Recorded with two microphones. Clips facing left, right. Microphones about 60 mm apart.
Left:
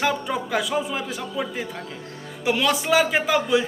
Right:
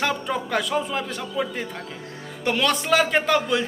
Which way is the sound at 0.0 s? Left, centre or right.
Centre.